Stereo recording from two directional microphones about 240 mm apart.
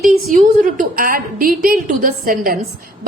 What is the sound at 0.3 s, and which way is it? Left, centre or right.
A woman's voice, right.